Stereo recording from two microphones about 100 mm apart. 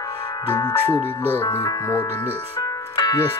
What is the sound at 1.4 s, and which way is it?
Speech, 30° left (ahead or behind).